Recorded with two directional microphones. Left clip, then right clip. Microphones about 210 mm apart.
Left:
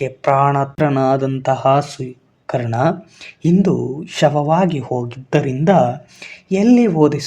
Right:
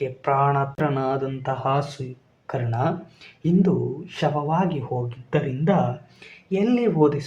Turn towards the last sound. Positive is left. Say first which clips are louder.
# left 6 dB
turn(degrees=35)  # may be behind; listen again after turning